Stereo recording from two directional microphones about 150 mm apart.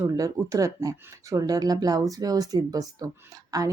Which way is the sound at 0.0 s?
25° right (ahead or behind).